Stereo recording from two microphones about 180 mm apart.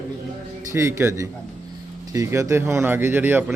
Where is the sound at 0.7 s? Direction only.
15° right (ahead or behind).